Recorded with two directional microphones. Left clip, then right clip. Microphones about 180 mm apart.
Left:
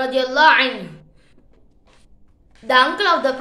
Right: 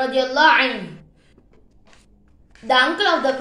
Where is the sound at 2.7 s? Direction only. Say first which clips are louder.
Left 2 dB; 25° left (ahead or behind).